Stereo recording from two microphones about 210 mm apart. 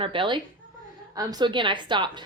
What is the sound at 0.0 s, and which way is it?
A woman's voice, 25° right (ahead or behind).